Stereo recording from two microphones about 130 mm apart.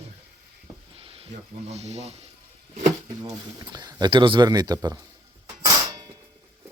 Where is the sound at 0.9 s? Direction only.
45° right (ahead or behind).